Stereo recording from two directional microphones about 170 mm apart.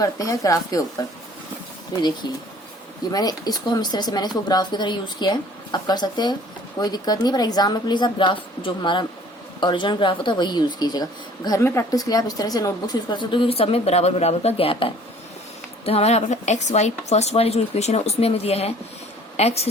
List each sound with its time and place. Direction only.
0.0 s speech: 20° left (ahead or behind)
2.2 s speech: 25° left (ahead or behind)